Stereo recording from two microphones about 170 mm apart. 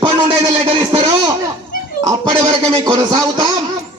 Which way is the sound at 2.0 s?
25° right (ahead or behind).